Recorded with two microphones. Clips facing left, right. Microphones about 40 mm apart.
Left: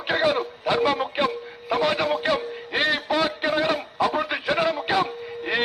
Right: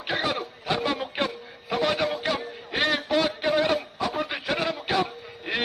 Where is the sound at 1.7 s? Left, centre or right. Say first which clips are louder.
Left 3 dB; centre.